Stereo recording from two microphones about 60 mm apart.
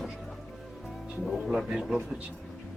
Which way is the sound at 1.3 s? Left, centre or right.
Centre.